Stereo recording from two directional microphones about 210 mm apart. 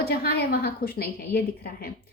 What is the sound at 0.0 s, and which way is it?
A woman's voice, 45° left (ahead or behind).